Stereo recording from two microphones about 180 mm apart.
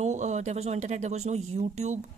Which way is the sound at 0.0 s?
40° right (ahead or behind).